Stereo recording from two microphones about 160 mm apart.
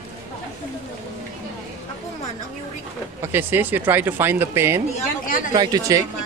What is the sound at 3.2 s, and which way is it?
A woman's voice, 15° right (ahead or behind).